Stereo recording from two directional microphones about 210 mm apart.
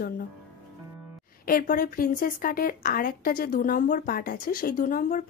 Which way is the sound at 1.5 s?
45° left (ahead or behind).